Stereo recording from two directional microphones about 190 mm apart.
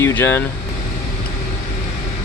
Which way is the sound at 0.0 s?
10° left (ahead or behind).